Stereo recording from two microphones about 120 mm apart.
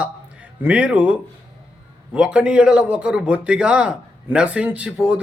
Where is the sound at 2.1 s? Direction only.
10° right (ahead or behind).